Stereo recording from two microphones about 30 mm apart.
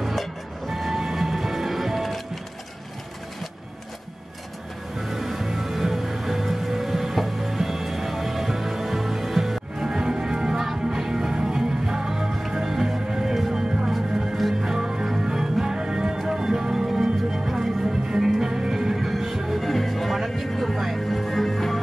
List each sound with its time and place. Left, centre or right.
0.0 s music: centre
5.0 s music: centre
13.3 s music: centre
16.7 s music: centre
19.0 s music: centre
19.6 s music: centre